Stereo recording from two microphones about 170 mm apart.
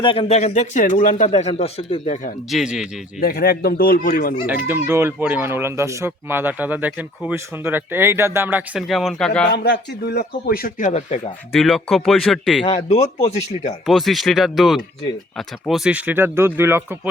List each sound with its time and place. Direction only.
0.0 s speech: 30° left (ahead or behind)
2.5 s speech: centre (ahead or behind)
3.2 s speech: 60° left (ahead or behind)
4.4 s speech: 10° right (ahead or behind)
9.5 s speech: 75° left (ahead or behind); by 11.2 s 45° left (ahead or behind)
11.5 s speech: centre (ahead or behind)
12.6 s speech: 40° left (ahead or behind)
13.8 s speech: centre (ahead or behind)